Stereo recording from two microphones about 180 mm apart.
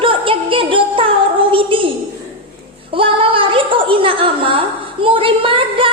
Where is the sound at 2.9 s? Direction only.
30° right (ahead or behind).